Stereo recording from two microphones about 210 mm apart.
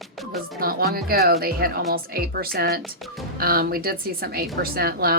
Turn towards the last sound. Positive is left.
turn(degrees=-45)  # may be behind; listen again after turning